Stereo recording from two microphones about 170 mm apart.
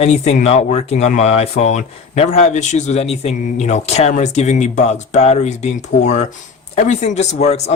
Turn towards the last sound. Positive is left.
turn(degrees=40)  # may be behind; listen again after turning